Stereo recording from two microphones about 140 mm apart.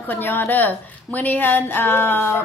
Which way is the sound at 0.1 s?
15° left (ahead or behind).